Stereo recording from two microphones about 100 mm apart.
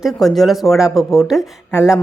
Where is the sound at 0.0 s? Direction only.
Centre (ahead or behind).